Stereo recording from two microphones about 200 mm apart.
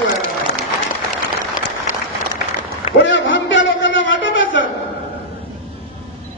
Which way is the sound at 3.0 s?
70° left (ahead or behind).